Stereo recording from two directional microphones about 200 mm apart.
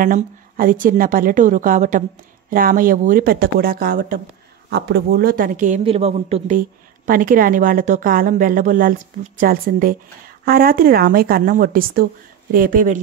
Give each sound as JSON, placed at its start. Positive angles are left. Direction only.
{"t": 0.0, "sound": "a woman's voice", "side_deg": -45}
{"t": 7.1, "sound": "a woman's voice", "side_deg": -45}